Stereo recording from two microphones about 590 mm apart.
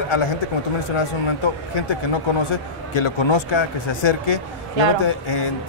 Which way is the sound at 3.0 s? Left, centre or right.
Left.